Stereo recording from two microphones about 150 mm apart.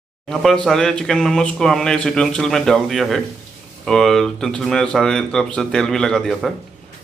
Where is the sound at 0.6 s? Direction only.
5° left (ahead or behind).